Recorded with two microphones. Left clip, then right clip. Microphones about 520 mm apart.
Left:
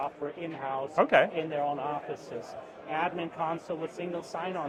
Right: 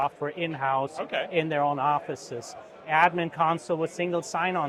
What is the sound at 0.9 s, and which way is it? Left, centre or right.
Speech, left.